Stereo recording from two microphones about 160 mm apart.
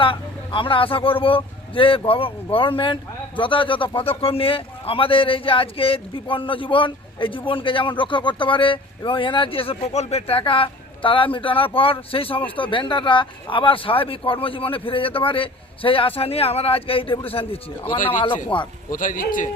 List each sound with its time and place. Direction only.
0.0 s speech: 30° left (ahead or behind)
18.9 s a man's voice: 55° left (ahead or behind)